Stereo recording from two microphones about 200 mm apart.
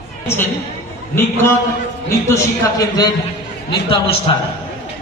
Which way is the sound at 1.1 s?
10° left (ahead or behind).